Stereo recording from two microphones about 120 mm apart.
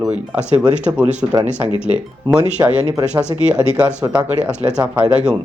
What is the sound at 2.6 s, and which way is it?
Speech, 30° right (ahead or behind).